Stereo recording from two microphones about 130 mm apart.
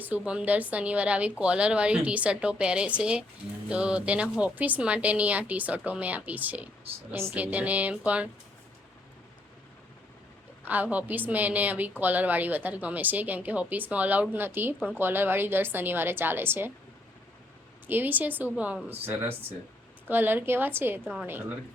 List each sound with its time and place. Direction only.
0.0 s a woman's voice: 10° right (ahead or behind)
10.7 s a woman's voice: 10° right (ahead or behind)
17.8 s a woman's voice: 15° right (ahead or behind)